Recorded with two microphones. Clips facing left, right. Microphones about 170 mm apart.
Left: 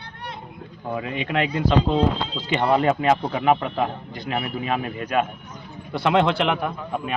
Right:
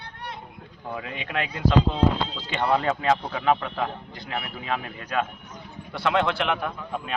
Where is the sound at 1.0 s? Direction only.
20° left (ahead or behind).